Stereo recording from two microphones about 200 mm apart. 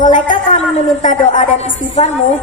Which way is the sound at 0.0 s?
40° left (ahead or behind).